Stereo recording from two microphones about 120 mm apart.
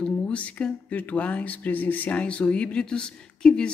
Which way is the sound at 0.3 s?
10° left (ahead or behind).